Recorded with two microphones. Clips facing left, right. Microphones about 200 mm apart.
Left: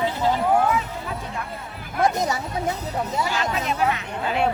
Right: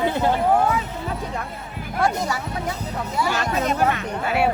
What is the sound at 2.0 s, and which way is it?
Speech, 20° left (ahead or behind).